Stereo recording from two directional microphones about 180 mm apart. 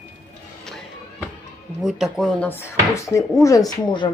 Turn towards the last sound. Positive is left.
turn(degrees=20)  # may be behind; listen again after turning